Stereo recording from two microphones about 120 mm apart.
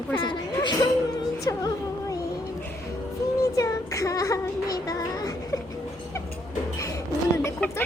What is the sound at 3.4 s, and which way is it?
Child singing, 25° left (ahead or behind).